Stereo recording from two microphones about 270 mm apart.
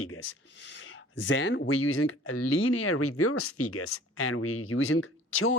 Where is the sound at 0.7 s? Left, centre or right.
Left.